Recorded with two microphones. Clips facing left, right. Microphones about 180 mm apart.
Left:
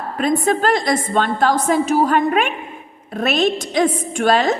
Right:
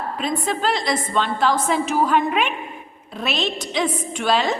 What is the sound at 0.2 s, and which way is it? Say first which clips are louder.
A woman's voice: left 8 dB; 50° left (ahead or behind).